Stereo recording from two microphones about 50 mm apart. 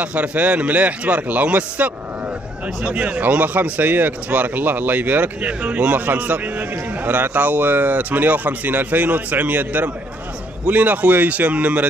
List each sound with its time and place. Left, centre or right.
0.0 s speech: right